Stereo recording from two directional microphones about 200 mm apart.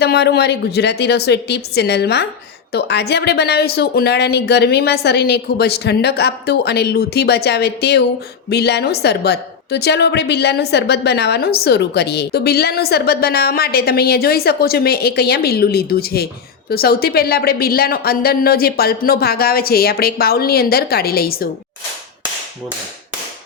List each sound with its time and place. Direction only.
0.0 s a woman's voice: 55° left (ahead or behind)